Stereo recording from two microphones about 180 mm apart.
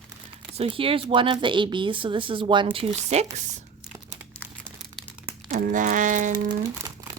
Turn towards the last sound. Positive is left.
turn(degrees=-20)  # may be behind; listen again after turning